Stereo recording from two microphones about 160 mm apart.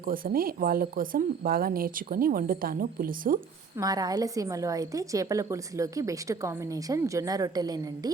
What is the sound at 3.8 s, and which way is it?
A woman's voice, 25° right (ahead or behind).